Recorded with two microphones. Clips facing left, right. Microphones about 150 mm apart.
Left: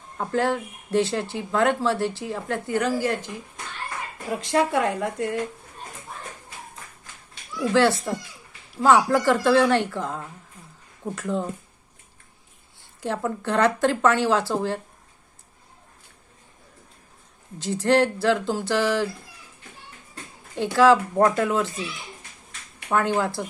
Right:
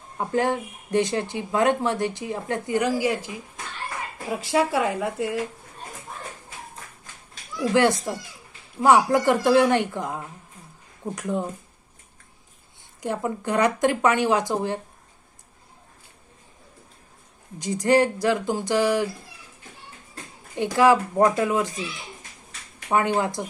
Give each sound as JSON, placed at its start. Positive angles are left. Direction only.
{"t": 0.2, "sound": "speech", "side_deg": -15}
{"t": 7.7, "sound": "speech", "side_deg": -15}
{"t": 13.0, "sound": "speech", "side_deg": -10}
{"t": 17.6, "sound": "speech", "side_deg": -10}
{"t": 20.7, "sound": "speech", "side_deg": -15}
{"t": 22.9, "sound": "speech", "side_deg": -15}